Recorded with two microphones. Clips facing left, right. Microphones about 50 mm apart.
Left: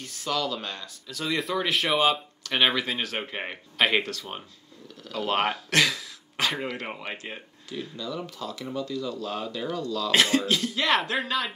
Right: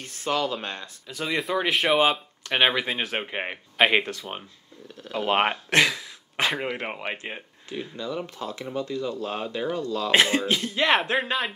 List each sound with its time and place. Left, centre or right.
0.0 s speech: right